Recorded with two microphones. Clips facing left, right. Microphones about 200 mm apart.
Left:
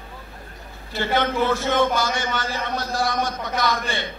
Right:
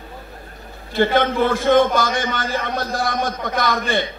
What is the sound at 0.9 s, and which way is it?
A man's voice, 55° right (ahead or behind).